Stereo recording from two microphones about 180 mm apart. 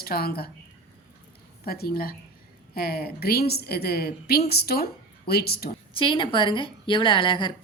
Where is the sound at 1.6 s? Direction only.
60° left (ahead or behind).